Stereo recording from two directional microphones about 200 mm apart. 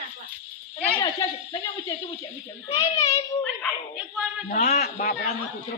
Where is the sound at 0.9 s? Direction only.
20° left (ahead or behind).